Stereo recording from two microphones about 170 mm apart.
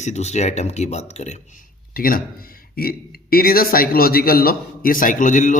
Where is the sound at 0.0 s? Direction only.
40° left (ahead or behind).